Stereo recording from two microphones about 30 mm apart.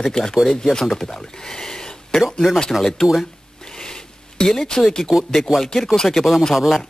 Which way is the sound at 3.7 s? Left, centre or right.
Left.